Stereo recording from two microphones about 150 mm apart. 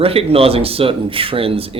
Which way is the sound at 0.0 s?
40° right (ahead or behind).